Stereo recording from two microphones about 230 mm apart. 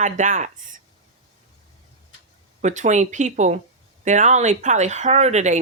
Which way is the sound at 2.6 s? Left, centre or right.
Right.